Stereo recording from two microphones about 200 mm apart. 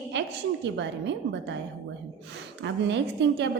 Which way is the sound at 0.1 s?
60° right (ahead or behind).